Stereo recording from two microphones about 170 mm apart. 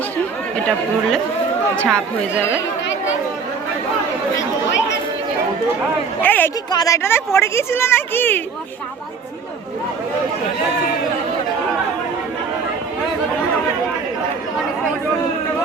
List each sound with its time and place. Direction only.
1.7 s speech: 5° left (ahead or behind)
6.2 s speech: 10° left (ahead or behind)
6.7 s a woman's voice: 20° left (ahead or behind)